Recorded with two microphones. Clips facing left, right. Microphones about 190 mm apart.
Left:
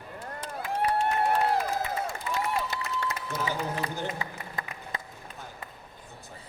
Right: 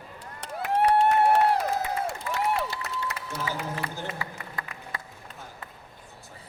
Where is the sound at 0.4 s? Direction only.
70° right (ahead or behind).